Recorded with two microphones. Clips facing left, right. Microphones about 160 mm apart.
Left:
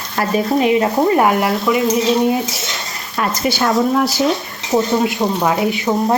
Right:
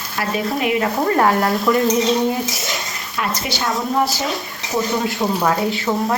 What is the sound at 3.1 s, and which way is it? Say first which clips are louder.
Speech: left 5 dB; 40° left (ahead or behind).